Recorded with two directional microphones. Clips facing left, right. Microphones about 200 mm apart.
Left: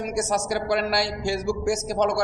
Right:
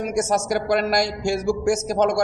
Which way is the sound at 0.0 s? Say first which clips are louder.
Right 3 dB; 45° right (ahead or behind).